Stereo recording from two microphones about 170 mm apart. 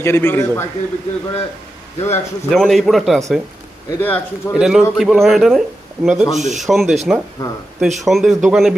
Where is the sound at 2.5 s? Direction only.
Centre (ahead or behind).